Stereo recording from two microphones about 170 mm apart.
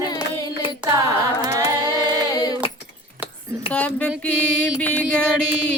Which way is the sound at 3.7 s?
5° left (ahead or behind).